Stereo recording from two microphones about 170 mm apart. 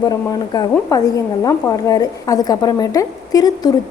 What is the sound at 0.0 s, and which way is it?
A woman's voice, 20° left (ahead or behind).